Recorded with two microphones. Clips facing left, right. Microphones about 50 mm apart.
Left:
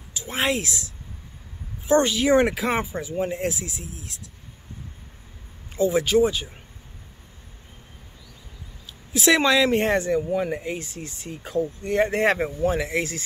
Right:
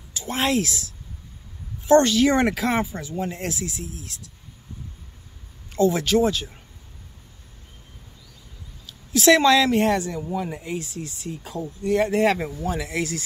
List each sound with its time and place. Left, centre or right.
0.1 s speech: centre
1.9 s speech: centre
5.8 s speech: centre
8.8 s a sound: centre
9.7 s speech: left